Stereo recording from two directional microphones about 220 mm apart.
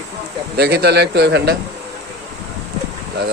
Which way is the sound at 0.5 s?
45° right (ahead or behind).